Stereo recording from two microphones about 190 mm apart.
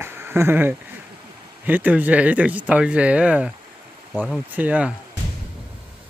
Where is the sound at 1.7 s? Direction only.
10° right (ahead or behind).